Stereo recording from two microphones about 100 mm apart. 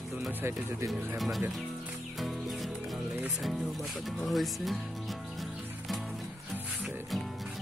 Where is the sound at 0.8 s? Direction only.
35° right (ahead or behind).